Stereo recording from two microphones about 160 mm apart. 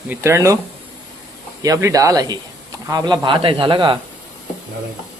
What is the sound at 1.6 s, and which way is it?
A man's voice, 20° right (ahead or behind).